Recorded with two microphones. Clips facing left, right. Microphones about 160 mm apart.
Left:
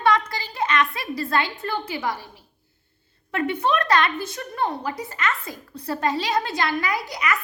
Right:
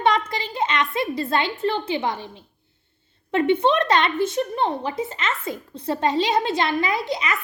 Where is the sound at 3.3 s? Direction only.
25° right (ahead or behind).